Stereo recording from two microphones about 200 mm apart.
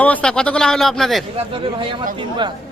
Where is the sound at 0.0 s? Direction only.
5° left (ahead or behind).